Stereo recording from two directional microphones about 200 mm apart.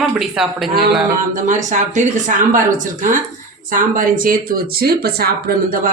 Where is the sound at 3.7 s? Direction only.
45° right (ahead or behind).